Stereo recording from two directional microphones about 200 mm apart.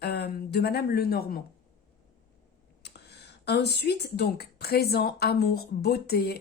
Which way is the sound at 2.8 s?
55° left (ahead or behind).